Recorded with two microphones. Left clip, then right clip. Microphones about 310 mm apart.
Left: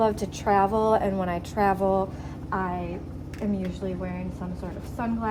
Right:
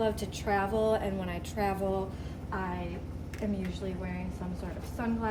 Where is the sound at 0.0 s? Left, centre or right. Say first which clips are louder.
Left 7 dB; left.